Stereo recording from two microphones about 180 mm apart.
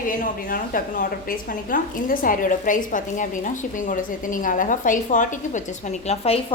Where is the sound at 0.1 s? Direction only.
50° left (ahead or behind).